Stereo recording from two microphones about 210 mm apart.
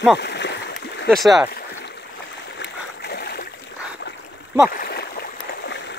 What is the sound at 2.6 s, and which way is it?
Stream, 50° left (ahead or behind).